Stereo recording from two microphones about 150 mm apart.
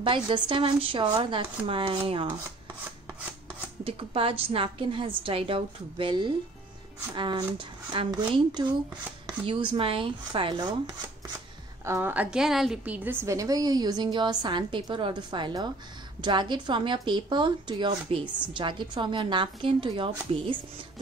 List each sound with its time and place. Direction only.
0.0 s a woman's voice: 35° right (ahead or behind)
3.8 s a woman's voice: 40° right (ahead or behind)
11.8 s a woman's voice: 15° right (ahead or behind); by 20.5 s 35° right (ahead or behind)